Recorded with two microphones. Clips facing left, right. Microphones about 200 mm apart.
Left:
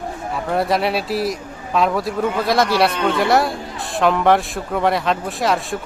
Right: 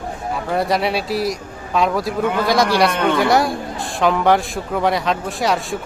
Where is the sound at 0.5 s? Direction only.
Centre (ahead or behind).